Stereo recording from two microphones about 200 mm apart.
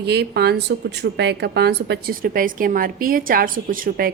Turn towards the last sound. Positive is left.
turn(degrees=-45)  # may be behind; listen again after turning